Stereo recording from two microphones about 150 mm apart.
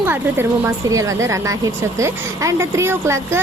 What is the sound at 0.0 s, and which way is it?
Speech, 15° right (ahead or behind).